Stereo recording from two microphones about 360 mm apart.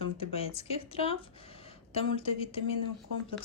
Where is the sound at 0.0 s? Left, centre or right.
Centre.